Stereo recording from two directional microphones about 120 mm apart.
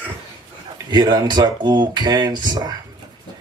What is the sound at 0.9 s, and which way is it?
Speech, 35° right (ahead or behind).